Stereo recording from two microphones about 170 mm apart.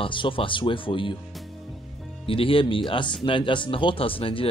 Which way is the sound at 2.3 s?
30° left (ahead or behind).